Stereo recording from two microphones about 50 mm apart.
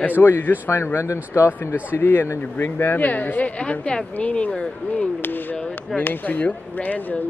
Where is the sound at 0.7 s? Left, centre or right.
Left.